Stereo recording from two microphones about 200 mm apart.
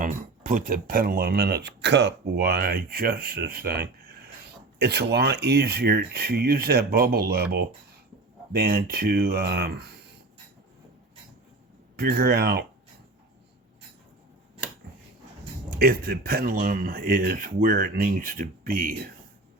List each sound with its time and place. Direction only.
0.0 s speech: 40° right (ahead or behind)
11.9 s speech: 50° right (ahead or behind)
15.7 s speech: 50° right (ahead or behind)